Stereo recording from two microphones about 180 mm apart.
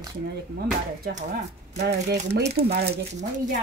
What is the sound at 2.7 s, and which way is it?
Speech, 65° right (ahead or behind).